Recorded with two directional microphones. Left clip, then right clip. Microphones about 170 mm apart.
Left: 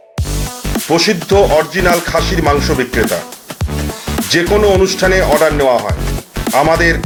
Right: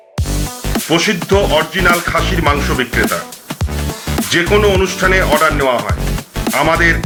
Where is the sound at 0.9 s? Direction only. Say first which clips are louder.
Left 2 dB; 30° left (ahead or behind).